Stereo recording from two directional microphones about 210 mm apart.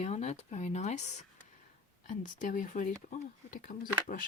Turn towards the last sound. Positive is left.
turn(degrees=40)  # may be behind; listen again after turning